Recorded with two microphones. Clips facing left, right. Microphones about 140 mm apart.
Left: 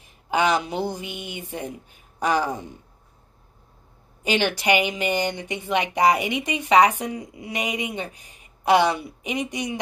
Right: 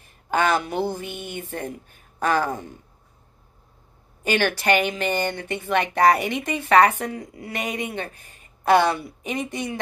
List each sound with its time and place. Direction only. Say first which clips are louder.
0.3 s speech: even; 15° left (ahead or behind)
4.2 s speech: right 1 dB; 20° left (ahead or behind)